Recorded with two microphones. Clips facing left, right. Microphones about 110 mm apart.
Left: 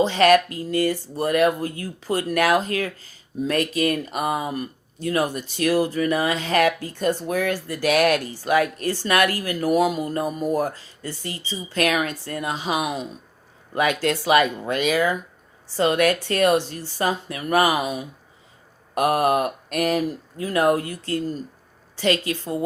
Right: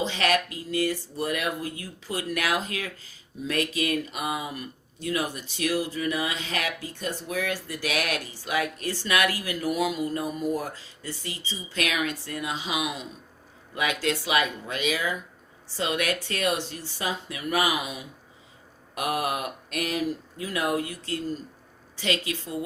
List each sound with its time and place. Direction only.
0.0 s speech: 50° left (ahead or behind)